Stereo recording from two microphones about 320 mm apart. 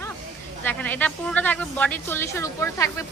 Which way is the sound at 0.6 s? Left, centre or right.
Centre.